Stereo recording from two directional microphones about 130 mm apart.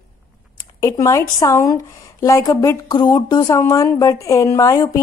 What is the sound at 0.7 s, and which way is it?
Speech, 25° left (ahead or behind).